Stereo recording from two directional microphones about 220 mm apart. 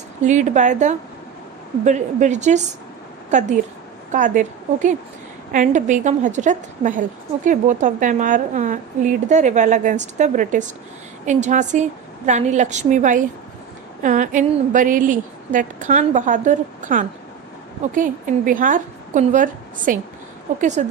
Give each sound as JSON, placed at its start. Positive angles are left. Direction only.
{"t": 0.3, "sound": "a woman's voice", "side_deg": -35}